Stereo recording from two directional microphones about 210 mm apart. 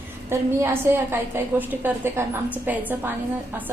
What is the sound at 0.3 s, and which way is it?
A woman's voice, 10° right (ahead or behind).